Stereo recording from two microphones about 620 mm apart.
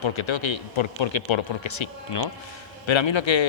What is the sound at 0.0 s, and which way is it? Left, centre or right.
A man's voice, left.